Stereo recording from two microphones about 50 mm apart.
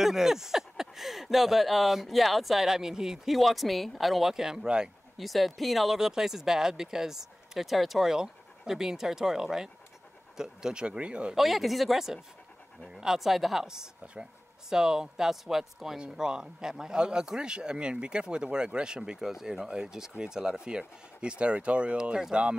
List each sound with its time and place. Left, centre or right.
0.0 s speech: centre
5.1 s speech: centre; by 11.3 s right
11.3 s speech: centre
16.0 s speech: centre